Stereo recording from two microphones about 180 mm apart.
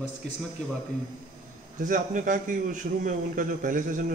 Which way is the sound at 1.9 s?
45° right (ahead or behind).